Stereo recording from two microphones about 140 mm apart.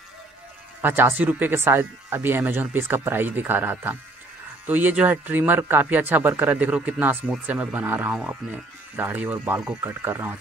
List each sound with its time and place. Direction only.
0.7 s speech: 15° right (ahead or behind)